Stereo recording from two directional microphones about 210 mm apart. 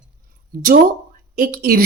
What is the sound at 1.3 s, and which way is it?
Speech, 45° right (ahead or behind).